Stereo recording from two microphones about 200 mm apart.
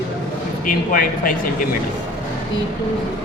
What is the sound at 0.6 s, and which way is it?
Speech, 45° left (ahead or behind).